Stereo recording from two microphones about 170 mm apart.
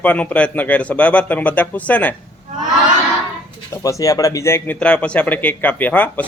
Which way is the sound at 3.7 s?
20° left (ahead or behind).